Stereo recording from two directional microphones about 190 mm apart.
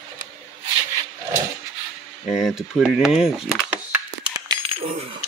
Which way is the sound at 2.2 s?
Centre (ahead or behind).